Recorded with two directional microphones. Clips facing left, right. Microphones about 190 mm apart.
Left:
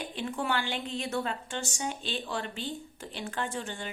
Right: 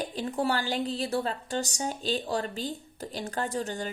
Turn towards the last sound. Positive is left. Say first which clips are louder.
# right 4 dB
turn(degrees=-40)  # may be behind; listen again after turning